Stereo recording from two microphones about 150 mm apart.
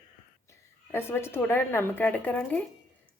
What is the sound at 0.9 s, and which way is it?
Speech, 15° left (ahead or behind).